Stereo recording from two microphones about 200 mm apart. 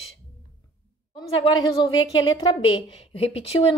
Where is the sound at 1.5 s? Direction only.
25° left (ahead or behind).